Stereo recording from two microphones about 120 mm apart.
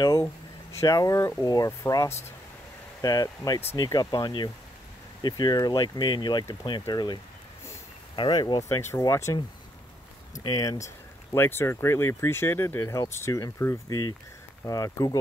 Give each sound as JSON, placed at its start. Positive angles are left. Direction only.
{"t": 0.7, "sound": "speech", "side_deg": 30}
{"t": 8.2, "sound": "speech", "side_deg": 40}
{"t": 11.3, "sound": "speech", "side_deg": 20}